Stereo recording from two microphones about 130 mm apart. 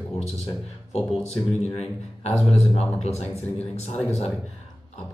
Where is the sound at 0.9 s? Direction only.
55° left (ahead or behind).